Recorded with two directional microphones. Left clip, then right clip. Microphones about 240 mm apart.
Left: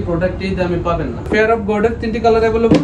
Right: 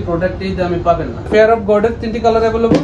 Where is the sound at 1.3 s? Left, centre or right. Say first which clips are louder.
Right 4 dB; centre.